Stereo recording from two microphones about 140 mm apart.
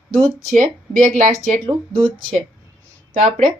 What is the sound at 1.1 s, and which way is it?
Speech, 65° right (ahead or behind).